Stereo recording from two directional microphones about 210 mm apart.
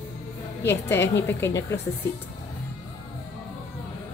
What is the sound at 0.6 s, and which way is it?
A woman's voice, 10° left (ahead or behind).